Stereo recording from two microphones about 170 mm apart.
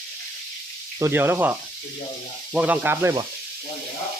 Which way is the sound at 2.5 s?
10° right (ahead or behind).